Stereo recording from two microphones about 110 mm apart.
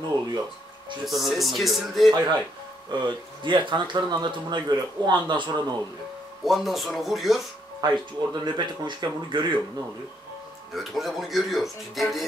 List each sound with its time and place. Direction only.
1.0 s speech: centre (ahead or behind)
2.1 s speech: 45° right (ahead or behind)
6.4 s speech: centre (ahead or behind)
7.8 s speech: 40° right (ahead or behind)
10.7 s speech: centre (ahead or behind)